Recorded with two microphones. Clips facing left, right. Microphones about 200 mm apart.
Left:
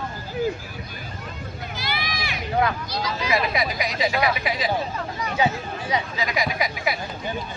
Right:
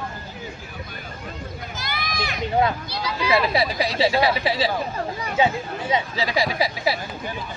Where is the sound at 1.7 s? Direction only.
45° right (ahead or behind).